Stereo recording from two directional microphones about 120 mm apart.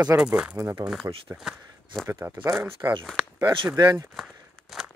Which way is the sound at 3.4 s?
45° right (ahead or behind).